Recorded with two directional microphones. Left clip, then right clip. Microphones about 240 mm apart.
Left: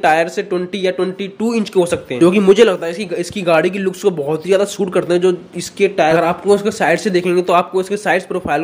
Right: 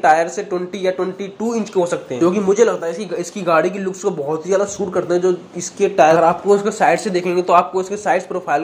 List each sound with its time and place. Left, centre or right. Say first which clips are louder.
0.0 s a man's voice: even; left
1.6 s speech: left 3 dB; left
2.3 s a man's voice: left 5 dB; left
3.4 s a man's voice: left 2 dB; left
4.9 s speech: left 2 dB; left
6.8 s a man's voice: left 1 dB; left